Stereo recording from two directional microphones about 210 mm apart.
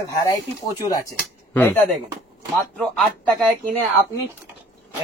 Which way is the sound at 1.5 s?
10° left (ahead or behind).